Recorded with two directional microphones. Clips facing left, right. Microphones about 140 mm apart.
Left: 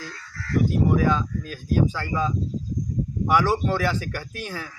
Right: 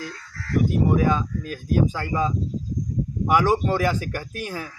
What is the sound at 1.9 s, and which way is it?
Speech, 15° right (ahead or behind).